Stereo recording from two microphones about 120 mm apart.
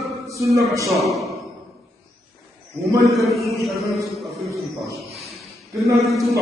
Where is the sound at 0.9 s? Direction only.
Centre (ahead or behind).